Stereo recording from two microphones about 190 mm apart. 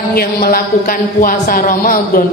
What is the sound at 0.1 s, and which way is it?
A man's voice, 50° left (ahead or behind).